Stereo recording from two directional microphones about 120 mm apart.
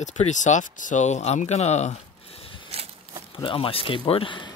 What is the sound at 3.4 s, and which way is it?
Speech, 45° left (ahead or behind).